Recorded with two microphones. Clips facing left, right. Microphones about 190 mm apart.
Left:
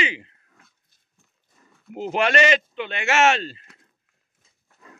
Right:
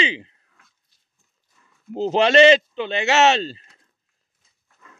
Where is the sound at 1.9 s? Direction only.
25° right (ahead or behind).